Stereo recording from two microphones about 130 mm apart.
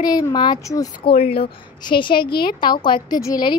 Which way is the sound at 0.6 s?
25° left (ahead or behind).